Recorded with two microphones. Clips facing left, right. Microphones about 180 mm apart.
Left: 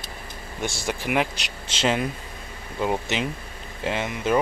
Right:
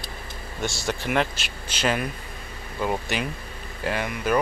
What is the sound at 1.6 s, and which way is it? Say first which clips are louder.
Speech: left 2 dB; 25° left (ahead or behind).